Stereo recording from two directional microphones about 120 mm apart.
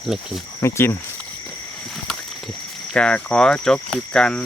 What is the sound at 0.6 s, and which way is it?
Speech, 20° left (ahead or behind).